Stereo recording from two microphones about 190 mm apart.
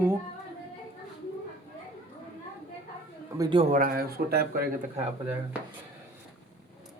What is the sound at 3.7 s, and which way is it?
Speech, 50° right (ahead or behind).